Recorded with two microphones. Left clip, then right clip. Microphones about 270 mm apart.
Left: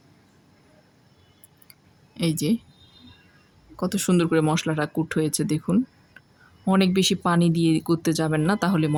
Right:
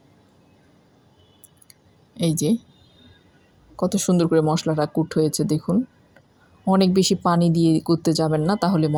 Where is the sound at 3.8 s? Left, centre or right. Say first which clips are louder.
Right 3 dB; centre.